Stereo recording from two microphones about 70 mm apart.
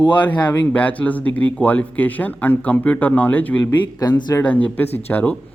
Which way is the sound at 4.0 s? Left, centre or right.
Left.